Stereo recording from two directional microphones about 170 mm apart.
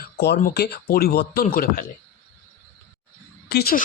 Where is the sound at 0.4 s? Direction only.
70° left (ahead or behind).